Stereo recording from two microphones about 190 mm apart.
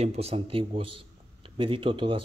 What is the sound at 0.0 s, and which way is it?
A man's voice, 35° right (ahead or behind).